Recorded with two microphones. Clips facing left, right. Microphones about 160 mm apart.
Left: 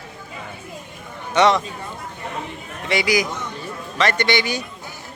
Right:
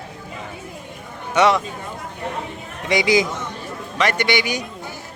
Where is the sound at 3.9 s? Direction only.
10° right (ahead or behind).